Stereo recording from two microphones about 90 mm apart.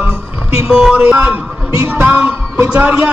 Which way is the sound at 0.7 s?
Centre (ahead or behind).